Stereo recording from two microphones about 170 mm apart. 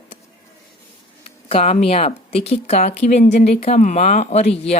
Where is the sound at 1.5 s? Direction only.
40° left (ahead or behind).